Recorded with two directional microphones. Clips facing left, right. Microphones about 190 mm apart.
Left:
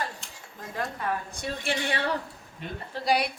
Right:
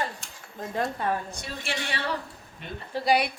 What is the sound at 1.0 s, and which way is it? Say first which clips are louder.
Speech: right 1 dB; 30° right (ahead or behind).